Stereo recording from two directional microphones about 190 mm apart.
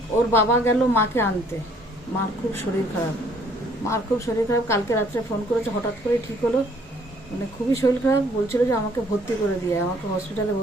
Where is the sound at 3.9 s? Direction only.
15° left (ahead or behind).